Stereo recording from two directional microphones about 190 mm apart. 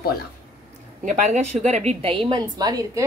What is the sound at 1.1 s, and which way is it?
A woman's voice, 40° right (ahead or behind).